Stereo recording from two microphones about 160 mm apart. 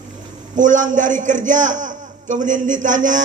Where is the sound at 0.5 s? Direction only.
50° right (ahead or behind).